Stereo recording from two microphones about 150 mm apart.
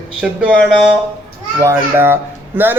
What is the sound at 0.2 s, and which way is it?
Speech, 5° right (ahead or behind).